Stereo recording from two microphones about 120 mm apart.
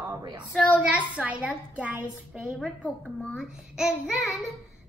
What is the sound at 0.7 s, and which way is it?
A child's voice, 10° right (ahead or behind).